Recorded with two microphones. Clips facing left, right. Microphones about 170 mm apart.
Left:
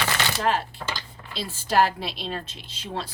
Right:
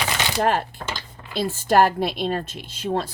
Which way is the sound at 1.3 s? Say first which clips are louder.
Right 7 dB; 50° right (ahead or behind).